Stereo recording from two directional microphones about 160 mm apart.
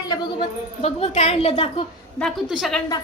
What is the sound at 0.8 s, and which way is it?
A woman's voice, 40° left (ahead or behind).